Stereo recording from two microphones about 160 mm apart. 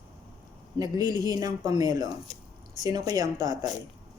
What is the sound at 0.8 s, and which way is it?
Speech, 25° right (ahead or behind).